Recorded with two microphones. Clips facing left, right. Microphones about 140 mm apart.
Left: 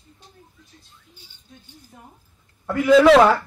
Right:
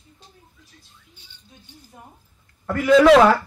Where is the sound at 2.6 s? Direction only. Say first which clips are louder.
Even; centre (ahead or behind).